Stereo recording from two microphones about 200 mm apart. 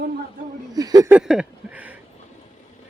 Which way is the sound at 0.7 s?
20° right (ahead or behind).